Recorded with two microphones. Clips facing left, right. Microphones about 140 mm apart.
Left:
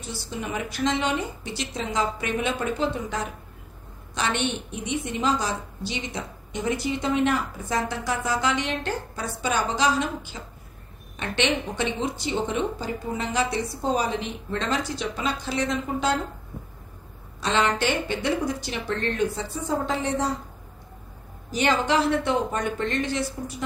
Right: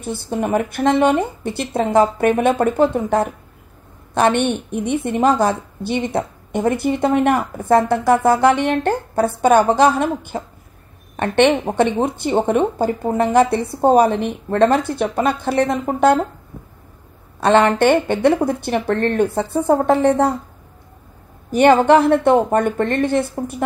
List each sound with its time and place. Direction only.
0.0 s a woman's voice: 55° right (ahead or behind)
17.4 s a woman's voice: 55° right (ahead or behind)
21.5 s a woman's voice: 55° right (ahead or behind)